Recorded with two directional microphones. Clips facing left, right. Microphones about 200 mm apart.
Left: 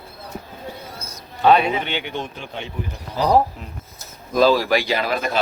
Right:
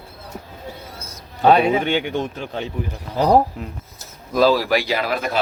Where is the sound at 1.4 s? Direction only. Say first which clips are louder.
Right 2 dB; 45° right (ahead or behind).